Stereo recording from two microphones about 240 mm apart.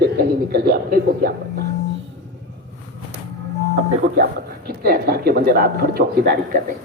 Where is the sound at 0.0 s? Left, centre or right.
Right.